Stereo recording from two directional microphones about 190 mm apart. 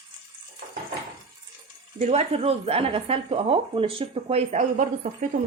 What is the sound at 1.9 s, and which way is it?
A woman's voice, 35° right (ahead or behind).